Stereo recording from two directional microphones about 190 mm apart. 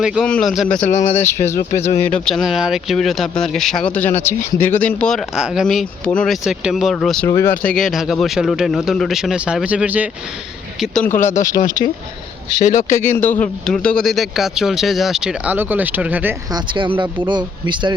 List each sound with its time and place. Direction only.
0.0 s speech: 5° right (ahead or behind)
0.8 s speech: 40° left (ahead or behind)
1.1 s speech: 15° left (ahead or behind)
7.3 s speech: 15° left (ahead or behind); by 10.1 s 10° right (ahead or behind)
10.8 s speech: 5° left (ahead or behind)
11.3 s speech: 45° left (ahead or behind)
12.9 s speech: 10° left (ahead or behind); by 16.3 s 10° right (ahead or behind)
16.5 s speech: 25° right (ahead or behind)